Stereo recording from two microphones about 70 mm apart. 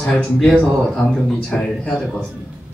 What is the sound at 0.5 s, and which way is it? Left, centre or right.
Speech, centre.